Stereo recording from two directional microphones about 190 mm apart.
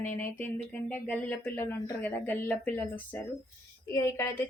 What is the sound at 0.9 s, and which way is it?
A woman's voice, 10° left (ahead or behind).